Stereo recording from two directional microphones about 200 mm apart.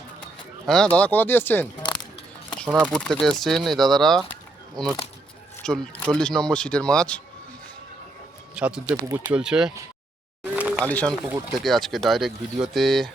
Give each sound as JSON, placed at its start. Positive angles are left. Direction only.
{"t": 0.7, "sound": "speech", "side_deg": 5}
{"t": 2.7, "sound": "speech", "side_deg": 5}
{"t": 5.6, "sound": "speech", "side_deg": 5}
{"t": 8.5, "sound": "speech", "side_deg": -5}
{"t": 8.9, "sound": "speech", "side_deg": -20}
{"t": 9.3, "sound": "speech", "side_deg": -5}
{"t": 10.5, "sound": "a sound", "side_deg": -5}
{"t": 10.8, "sound": "speech", "side_deg": 5}